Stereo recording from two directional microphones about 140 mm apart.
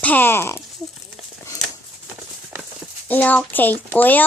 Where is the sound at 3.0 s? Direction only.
10° left (ahead or behind).